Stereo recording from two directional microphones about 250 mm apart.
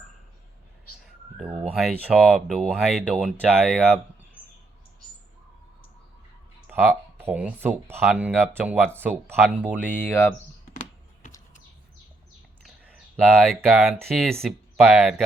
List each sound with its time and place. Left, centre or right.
1.7 s speech: centre
6.7 s speech: centre
9.8 s speech: centre
13.3 s speech: centre